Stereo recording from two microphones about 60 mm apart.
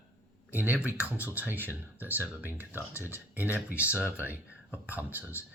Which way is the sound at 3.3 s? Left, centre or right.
Right.